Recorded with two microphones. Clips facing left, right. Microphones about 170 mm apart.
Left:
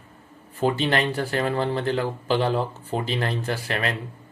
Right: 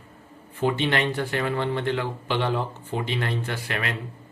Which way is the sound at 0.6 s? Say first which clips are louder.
Left 1 dB; 35° left (ahead or behind).